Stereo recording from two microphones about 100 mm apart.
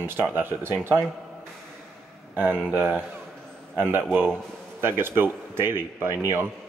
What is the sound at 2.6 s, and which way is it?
Speech, 20° right (ahead or behind).